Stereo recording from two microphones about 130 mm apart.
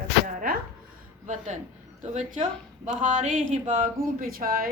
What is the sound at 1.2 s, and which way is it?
Speech, 65° right (ahead or behind).